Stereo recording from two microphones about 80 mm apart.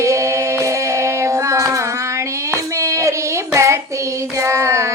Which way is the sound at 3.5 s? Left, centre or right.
Right.